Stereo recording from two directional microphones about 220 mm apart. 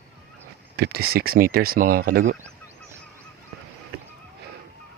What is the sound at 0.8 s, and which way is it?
Speech, 45° right (ahead or behind).